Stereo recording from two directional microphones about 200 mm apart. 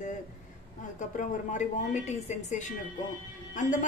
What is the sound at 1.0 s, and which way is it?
A woman's voice, 40° left (ahead or behind).